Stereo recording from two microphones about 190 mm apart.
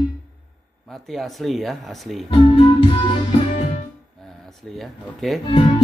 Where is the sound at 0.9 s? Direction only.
Centre (ahead or behind).